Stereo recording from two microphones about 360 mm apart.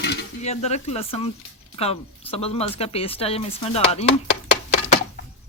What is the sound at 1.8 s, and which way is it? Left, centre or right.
Speech, centre.